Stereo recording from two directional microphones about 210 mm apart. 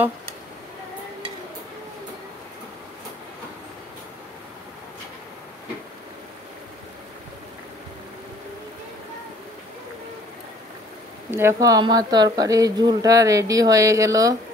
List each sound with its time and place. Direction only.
11.2 s speech: 10° right (ahead or behind)